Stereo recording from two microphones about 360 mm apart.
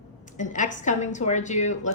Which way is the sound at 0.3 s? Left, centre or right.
Left.